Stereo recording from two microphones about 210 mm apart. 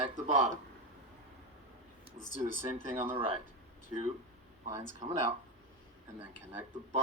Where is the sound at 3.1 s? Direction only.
25° right (ahead or behind).